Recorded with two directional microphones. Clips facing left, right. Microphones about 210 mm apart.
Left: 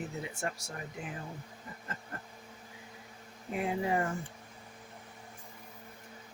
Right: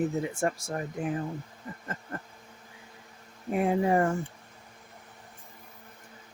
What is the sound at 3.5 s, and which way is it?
Speech, 50° right (ahead or behind).